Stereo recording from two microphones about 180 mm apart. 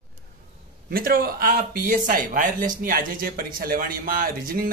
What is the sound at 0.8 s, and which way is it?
Speech, 55° right (ahead or behind).